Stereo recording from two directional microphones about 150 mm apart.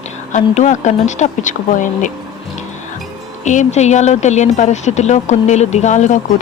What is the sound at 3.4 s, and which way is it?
A woman's voice, 55° left (ahead or behind).